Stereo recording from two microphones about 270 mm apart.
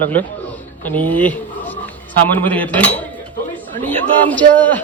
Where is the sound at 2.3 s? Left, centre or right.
Centre.